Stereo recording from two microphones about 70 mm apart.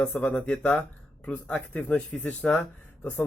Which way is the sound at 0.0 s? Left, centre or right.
Left.